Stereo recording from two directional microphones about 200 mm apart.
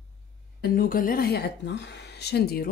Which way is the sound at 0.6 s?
45° left (ahead or behind).